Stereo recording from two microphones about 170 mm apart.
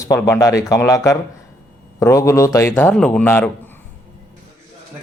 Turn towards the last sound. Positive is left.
turn(degrees=10)  # may be behind; listen again after turning